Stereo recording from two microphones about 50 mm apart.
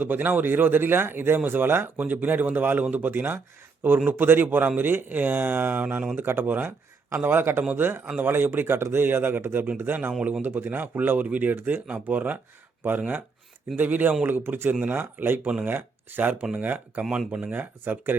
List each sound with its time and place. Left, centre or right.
0.0 s speech: right
10.1 s speech: right
10.4 s speech: right
13.7 s speech: right
16.4 s speech: right
16.6 s speech: right
17.0 s speech: centre
17.5 s speech: right